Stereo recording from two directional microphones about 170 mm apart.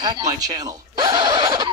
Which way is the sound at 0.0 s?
25° right (ahead or behind).